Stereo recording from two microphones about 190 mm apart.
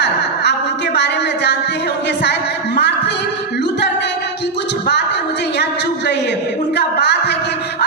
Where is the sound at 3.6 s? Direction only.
65° left (ahead or behind).